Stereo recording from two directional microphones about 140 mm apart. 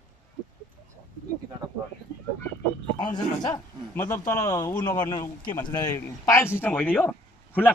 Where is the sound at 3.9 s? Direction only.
20° left (ahead or behind).